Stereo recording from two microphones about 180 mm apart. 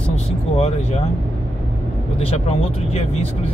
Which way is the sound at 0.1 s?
35° left (ahead or behind).